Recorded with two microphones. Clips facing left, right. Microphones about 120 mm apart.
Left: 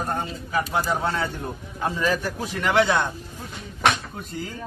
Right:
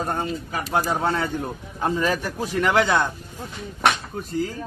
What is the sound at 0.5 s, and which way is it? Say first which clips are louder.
A man's voice: left 1 dB; 40° right (ahead or behind).